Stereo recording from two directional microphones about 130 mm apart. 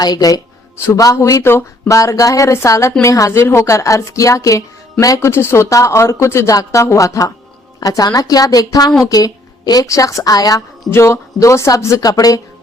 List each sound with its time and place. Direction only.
0.0 s a woman's voice: 30° left (ahead or behind)